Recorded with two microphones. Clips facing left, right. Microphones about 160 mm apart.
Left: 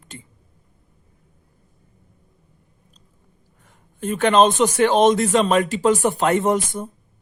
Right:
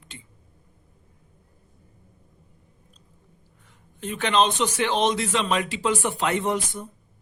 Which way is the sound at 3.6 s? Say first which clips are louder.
Left 6 dB; 45° left (ahead or behind).